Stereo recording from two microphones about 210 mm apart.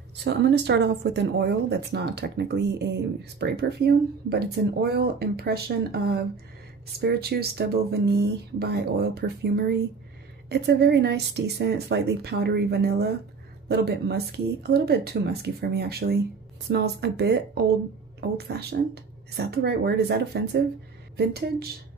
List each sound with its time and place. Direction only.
0.2 s speech: 55° right (ahead or behind)